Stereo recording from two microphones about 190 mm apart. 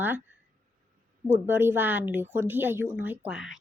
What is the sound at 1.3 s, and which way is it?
A woman's voice, 10° right (ahead or behind).